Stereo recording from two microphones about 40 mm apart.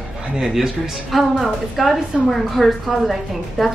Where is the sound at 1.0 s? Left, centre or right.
Centre.